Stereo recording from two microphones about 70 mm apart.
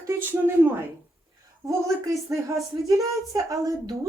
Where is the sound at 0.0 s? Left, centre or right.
Right.